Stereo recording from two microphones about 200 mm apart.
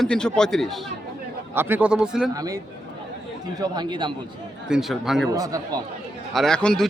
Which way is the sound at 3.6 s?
20° right (ahead or behind).